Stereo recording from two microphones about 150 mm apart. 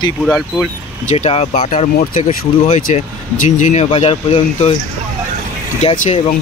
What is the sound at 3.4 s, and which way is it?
Speech, 55° left (ahead or behind).